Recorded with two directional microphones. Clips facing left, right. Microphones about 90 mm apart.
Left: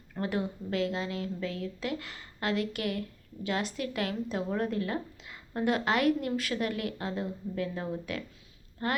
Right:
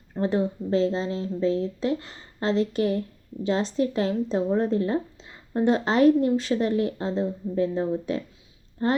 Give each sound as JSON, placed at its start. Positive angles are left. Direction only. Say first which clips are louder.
{"t": 0.1, "sound": "a woman's voice", "louder": "right 8 dB", "side_deg": -25}